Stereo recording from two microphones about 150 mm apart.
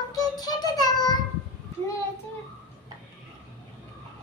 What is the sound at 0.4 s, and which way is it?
Child singing, 25° left (ahead or behind).